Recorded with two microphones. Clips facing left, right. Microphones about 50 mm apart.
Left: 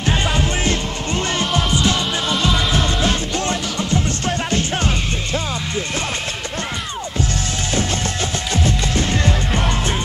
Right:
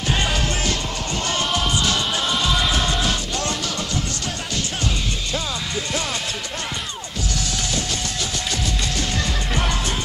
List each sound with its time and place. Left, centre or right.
0.1 s music: centre
0.7 s music: left
1.4 s music: centre
2.2 s music: centre
3.0 s music: left
8.6 s music: left